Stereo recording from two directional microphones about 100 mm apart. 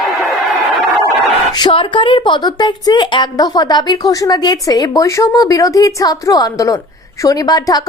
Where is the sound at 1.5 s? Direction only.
55° left (ahead or behind).